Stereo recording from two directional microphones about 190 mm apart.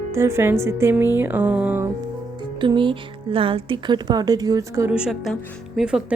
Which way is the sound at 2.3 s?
25° right (ahead or behind).